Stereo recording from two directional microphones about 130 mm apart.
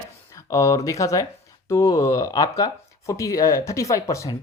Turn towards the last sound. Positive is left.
turn(degrees=25)  # may be behind; listen again after turning